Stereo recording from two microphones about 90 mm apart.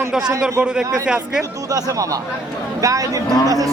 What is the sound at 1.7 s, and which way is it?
Cattle, 40° right (ahead or behind).